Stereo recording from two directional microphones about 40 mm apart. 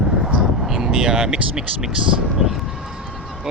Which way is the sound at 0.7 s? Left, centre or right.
Centre.